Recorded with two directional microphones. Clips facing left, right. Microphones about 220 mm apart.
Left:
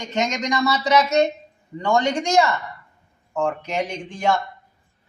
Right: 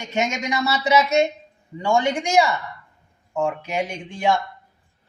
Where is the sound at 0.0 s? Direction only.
10° right (ahead or behind).